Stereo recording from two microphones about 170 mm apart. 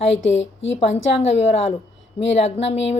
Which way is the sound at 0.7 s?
40° left (ahead or behind).